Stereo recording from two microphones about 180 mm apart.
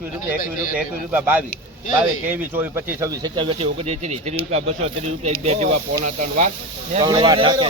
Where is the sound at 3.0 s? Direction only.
25° right (ahead or behind).